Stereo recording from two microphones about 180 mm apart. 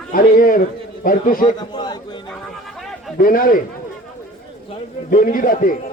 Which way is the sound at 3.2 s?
50° left (ahead or behind).